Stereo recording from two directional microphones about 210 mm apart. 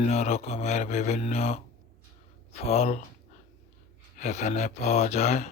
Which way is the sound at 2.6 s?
30° left (ahead or behind).